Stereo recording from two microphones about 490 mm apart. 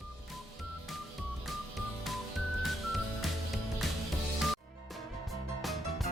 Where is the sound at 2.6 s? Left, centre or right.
Centre.